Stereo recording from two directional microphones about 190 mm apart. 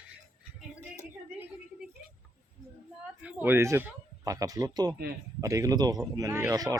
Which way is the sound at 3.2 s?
10° right (ahead or behind).